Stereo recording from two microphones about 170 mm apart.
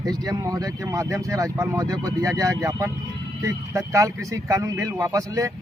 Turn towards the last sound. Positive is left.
turn(degrees=-20)  # may be behind; listen again after turning